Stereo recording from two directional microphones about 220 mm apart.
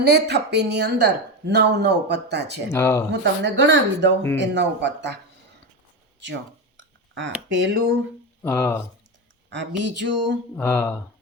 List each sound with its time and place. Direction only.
0.0 s speech: 50° right (ahead or behind)
2.7 s speech: 10° left (ahead or behind)
3.1 s speech: 55° right (ahead or behind)
6.7 s a sound: 55° right (ahead or behind)
7.5 s speech: 60° right (ahead or behind)
8.4 s speech: 10° left (ahead or behind)
9.5 s speech: 55° right (ahead or behind)
10.5 s speech: 10° left (ahead or behind)